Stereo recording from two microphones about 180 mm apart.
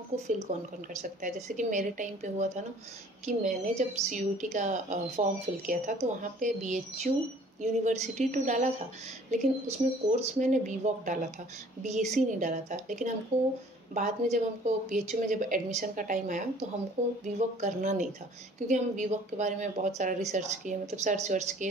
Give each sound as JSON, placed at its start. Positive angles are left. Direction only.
{"t": 0.1, "sound": "a woman's voice", "side_deg": -40}
{"t": 13.3, "sound": "speech", "side_deg": -15}
{"t": 13.9, "sound": "a woman's voice", "side_deg": -40}